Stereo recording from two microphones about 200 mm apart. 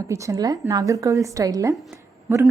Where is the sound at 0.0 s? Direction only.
15° right (ahead or behind).